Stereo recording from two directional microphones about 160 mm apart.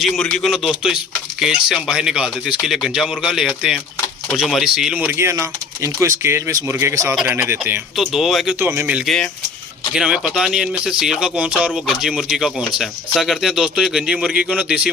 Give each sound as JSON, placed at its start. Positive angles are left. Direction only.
{"t": 0.0, "sound": "speech", "side_deg": 5}
{"t": 7.9, "sound": "speech", "side_deg": 0}
{"t": 8.5, "sound": "speech", "side_deg": -15}